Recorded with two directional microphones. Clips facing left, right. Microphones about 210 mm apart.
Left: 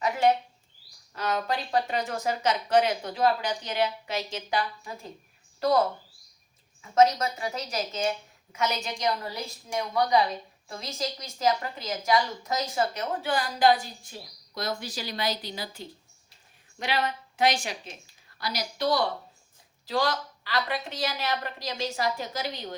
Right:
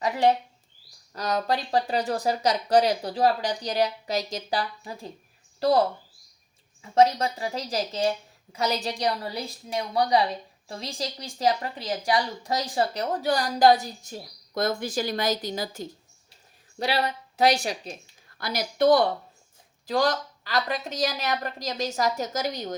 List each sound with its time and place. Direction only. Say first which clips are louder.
1.1 s speech: right 3 dB; 40° right (ahead or behind)
6.9 s a woman's voice: right 1 dB; 30° right (ahead or behind)
18.3 s a woman's voice: right 6 dB; 50° right (ahead or behind)